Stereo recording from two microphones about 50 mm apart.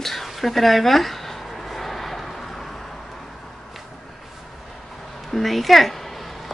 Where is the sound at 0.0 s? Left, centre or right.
Centre.